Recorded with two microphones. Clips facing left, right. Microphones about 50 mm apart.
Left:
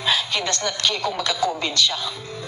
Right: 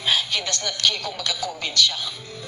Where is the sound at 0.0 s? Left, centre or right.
Left.